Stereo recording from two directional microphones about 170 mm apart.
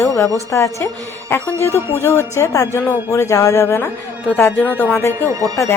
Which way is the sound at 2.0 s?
15° left (ahead or behind).